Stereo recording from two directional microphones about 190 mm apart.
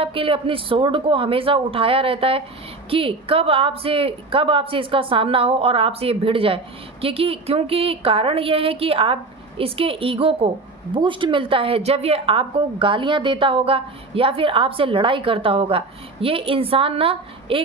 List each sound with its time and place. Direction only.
0.0 s a woman's voice: 30° right (ahead or behind)